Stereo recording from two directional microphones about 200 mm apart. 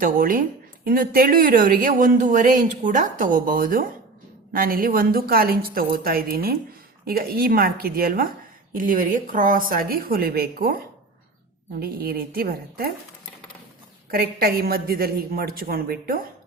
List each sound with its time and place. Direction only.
0.0 s speech: 45° right (ahead or behind)
14.1 s speech: 50° right (ahead or behind)